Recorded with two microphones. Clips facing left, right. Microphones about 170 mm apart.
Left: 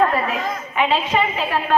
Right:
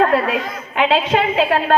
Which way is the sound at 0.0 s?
65° right (ahead or behind).